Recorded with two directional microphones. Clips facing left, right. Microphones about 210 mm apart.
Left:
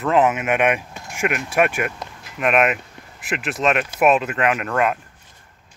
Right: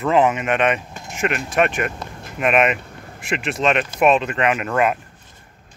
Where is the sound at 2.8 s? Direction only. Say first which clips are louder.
Right 5 dB; 50° right (ahead or behind).